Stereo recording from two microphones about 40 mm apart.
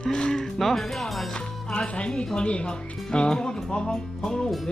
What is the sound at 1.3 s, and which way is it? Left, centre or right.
Speech, left.